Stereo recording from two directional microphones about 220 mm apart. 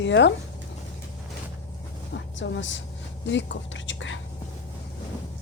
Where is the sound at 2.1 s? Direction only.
55° left (ahead or behind).